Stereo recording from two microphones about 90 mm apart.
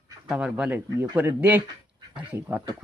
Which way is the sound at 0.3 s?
10° right (ahead or behind).